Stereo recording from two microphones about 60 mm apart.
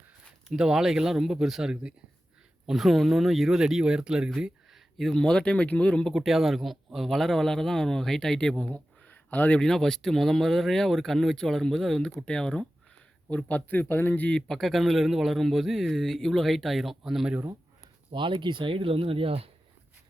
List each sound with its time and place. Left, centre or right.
0.5 s speech: centre
2.6 s speech: centre
4.4 s a sound: centre
5.1 s speech: centre
6.1 s a man's voice: centre
8.6 s a sound: left
9.6 s speech: centre
13.3 s speech: left
14.1 s speech: left
14.5 s a man's voice: centre